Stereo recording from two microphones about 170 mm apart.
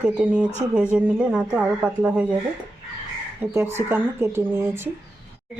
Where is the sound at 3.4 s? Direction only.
10° right (ahead or behind).